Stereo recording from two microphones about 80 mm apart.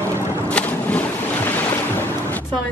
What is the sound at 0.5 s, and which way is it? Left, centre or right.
Boat, centre.